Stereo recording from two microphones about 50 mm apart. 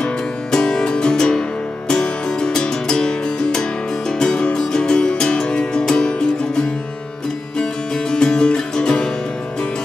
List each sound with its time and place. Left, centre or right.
0.0 s music: centre